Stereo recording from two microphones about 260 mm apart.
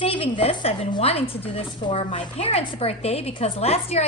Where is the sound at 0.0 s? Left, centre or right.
Centre.